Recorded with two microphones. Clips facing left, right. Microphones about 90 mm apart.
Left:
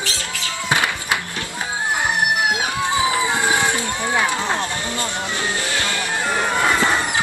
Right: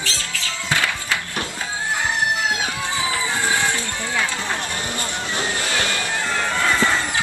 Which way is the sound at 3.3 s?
20° left (ahead or behind).